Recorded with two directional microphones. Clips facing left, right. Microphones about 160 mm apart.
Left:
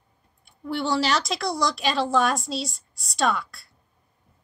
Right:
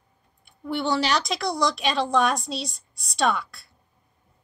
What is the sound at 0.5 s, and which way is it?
A woman's voice, centre (ahead or behind).